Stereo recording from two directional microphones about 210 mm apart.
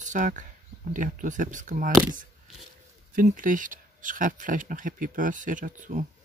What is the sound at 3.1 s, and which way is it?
Speech, 40° right (ahead or behind).